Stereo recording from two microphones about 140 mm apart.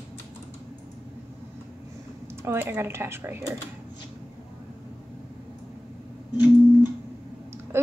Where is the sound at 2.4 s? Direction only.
15° right (ahead or behind).